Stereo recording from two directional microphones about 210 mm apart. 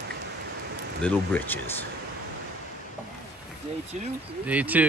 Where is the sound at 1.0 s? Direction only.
10° left (ahead or behind).